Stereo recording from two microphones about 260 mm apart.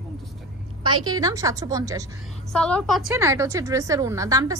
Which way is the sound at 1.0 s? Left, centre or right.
Centre.